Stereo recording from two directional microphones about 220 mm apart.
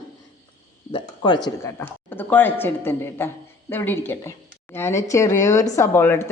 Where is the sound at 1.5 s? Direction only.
10° left (ahead or behind).